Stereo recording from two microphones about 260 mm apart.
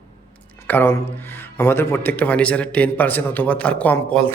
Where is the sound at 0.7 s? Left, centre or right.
Centre.